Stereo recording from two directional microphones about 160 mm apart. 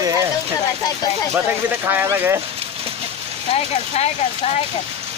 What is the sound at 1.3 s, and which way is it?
Speech, 10° right (ahead or behind).